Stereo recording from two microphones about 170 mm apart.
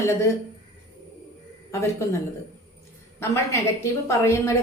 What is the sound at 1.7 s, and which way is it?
Speech, 15° left (ahead or behind).